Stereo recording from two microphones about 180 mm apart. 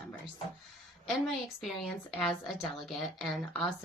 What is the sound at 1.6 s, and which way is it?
A woman's voice, centre (ahead or behind).